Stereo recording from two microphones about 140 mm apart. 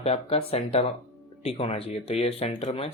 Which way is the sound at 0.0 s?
45° left (ahead or behind).